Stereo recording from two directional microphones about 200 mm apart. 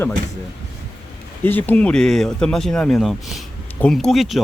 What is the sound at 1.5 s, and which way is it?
Speech, 10° left (ahead or behind).